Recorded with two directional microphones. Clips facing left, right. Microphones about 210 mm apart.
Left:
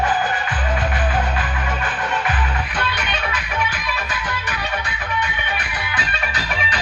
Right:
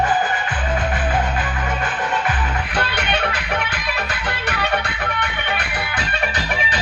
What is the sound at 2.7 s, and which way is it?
Music, 65° right (ahead or behind).